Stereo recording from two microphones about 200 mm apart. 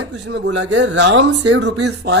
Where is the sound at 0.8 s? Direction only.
65° right (ahead or behind).